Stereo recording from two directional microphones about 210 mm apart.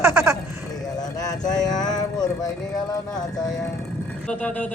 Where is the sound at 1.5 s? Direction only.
20° left (ahead or behind).